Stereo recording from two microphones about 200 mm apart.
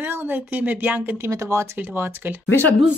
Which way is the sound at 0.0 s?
10° right (ahead or behind).